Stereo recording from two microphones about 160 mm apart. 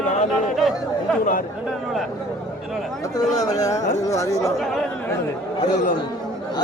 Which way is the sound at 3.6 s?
20° left (ahead or behind).